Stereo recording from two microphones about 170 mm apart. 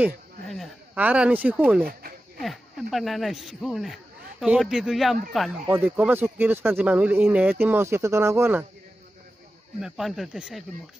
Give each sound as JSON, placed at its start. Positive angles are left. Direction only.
{"t": 0.5, "sound": "a sound", "side_deg": 0}
{"t": 1.0, "sound": "speech", "side_deg": -10}
{"t": 1.9, "sound": "a sound", "side_deg": -60}
{"t": 2.4, "sound": "speech", "side_deg": 0}
{"t": 5.7, "sound": "speech", "side_deg": -10}
{"t": 9.8, "sound": "speech", "side_deg": -5}